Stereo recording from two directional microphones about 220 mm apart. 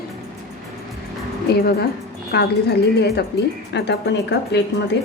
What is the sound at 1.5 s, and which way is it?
A woman's voice, 45° left (ahead or behind).